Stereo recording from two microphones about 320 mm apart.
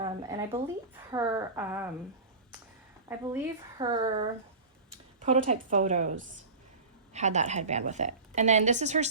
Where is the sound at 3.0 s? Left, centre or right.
Centre.